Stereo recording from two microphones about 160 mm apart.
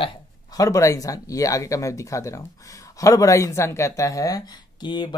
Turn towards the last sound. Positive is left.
turn(degrees=30)  # may be behind; listen again after turning